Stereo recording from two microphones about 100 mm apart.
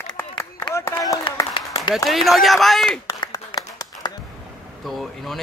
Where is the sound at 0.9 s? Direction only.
35° left (ahead or behind).